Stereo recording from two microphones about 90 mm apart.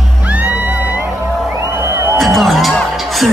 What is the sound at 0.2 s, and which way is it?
Music, 15° right (ahead or behind).